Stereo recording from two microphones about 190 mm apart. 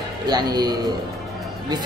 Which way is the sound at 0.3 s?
20° right (ahead or behind).